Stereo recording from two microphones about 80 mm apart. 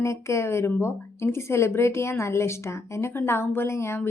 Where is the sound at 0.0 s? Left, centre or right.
Left.